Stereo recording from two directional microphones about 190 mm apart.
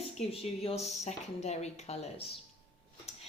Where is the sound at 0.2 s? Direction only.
30° left (ahead or behind).